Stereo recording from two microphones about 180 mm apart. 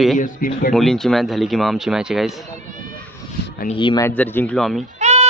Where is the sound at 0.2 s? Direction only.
45° left (ahead or behind).